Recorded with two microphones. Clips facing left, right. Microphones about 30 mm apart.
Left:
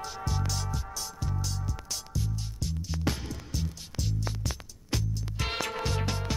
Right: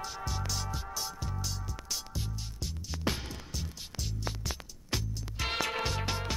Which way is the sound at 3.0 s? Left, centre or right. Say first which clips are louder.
Left 1 dB; centre.